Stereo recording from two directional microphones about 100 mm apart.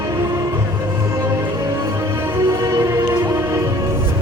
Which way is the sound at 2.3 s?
30° right (ahead or behind).